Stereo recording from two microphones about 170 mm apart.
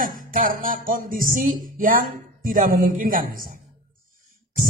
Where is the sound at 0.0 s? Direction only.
55° right (ahead or behind).